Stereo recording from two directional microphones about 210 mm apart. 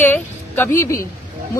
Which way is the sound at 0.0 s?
10° left (ahead or behind).